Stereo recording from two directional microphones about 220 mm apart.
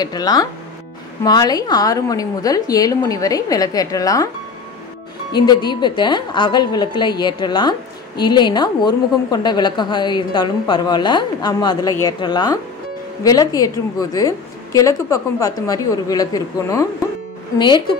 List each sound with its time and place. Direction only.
0.0 s a woman's voice: 15° left (ahead or behind)
5.3 s a woman's voice: 20° left (ahead or behind)